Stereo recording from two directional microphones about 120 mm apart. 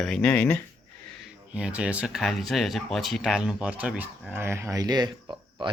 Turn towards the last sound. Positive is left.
turn(degrees=-35)  # may be behind; listen again after turning